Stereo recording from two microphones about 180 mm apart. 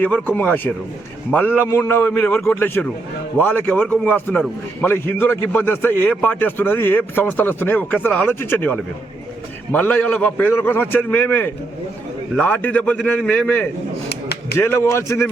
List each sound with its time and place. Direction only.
0.0 s a man's voice: 10° left (ahead or behind)
14.1 s a sound: 65° left (ahead or behind)
14.6 s a man's voice: 15° left (ahead or behind)